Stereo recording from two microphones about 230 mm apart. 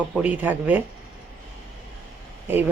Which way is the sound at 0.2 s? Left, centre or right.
Centre.